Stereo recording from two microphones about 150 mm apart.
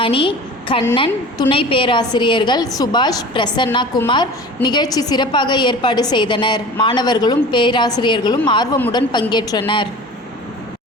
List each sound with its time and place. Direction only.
0.0 s a woman's voice: 35° left (ahead or behind)